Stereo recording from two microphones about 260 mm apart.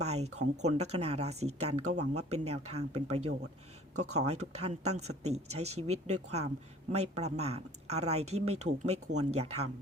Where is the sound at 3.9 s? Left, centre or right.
Right.